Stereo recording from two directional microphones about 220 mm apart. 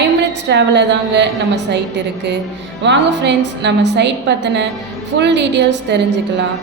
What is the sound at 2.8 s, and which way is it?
A woman's voice, 50° right (ahead or behind).